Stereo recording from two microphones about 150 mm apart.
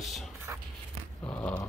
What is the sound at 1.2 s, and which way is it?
Dog, 10° left (ahead or behind).